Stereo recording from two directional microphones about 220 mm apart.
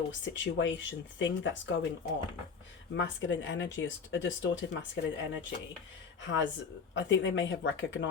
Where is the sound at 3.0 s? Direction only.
55° left (ahead or behind).